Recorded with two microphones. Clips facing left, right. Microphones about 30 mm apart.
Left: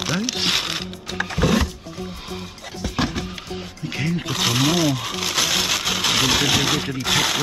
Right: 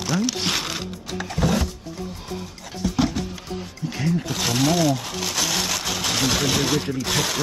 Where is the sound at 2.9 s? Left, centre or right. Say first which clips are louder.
Right 1 dB; left.